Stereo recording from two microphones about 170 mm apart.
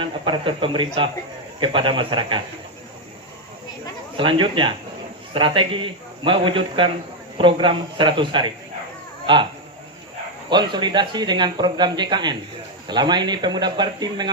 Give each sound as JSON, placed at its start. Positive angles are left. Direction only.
{"t": 0.0, "sound": "speech", "side_deg": -30}
{"t": 4.2, "sound": "speech", "side_deg": -30}
{"t": 10.5, "sound": "speech", "side_deg": -25}